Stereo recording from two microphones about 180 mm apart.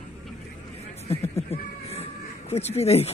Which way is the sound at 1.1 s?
35° left (ahead or behind).